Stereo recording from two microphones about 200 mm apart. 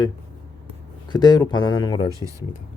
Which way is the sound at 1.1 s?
20° left (ahead or behind).